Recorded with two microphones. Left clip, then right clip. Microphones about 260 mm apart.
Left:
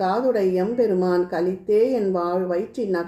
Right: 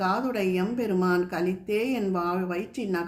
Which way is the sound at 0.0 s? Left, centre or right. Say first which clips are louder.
Left 6 dB; right.